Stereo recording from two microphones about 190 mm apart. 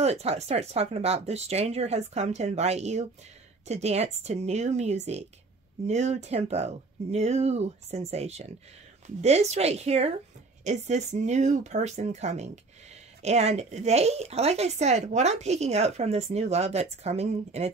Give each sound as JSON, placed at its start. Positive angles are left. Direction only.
{"t": 0.0, "sound": "speech", "side_deg": -35}